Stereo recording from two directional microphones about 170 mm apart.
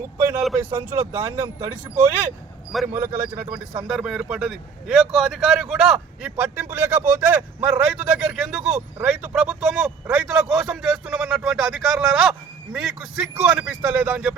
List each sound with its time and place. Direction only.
0.7 s a man's voice: 20° right (ahead or behind)
3.8 s a man's voice: centre (ahead or behind)